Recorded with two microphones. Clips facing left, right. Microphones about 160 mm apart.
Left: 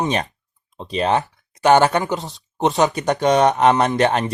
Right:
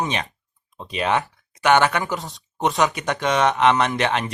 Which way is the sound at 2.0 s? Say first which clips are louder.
Left 3 dB; 20° left (ahead or behind).